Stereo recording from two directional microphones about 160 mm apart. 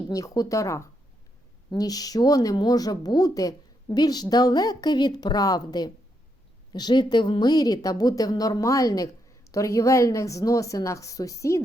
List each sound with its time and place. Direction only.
0.1 s a woman's voice: 20° left (ahead or behind)